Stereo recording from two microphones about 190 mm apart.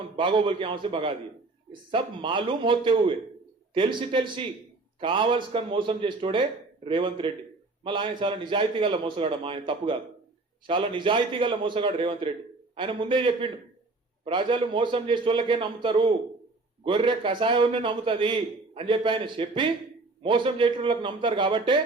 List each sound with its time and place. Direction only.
0.2 s a man's voice: 25° right (ahead or behind)